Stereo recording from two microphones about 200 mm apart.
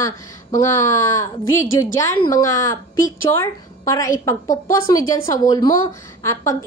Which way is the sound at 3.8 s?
15° left (ahead or behind).